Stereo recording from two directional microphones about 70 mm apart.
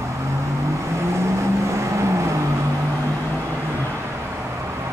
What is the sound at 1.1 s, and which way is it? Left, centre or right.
Vehicle, right.